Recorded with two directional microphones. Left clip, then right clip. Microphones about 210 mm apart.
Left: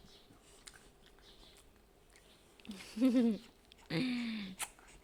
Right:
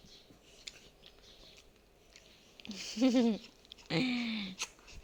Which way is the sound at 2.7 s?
10° left (ahead or behind).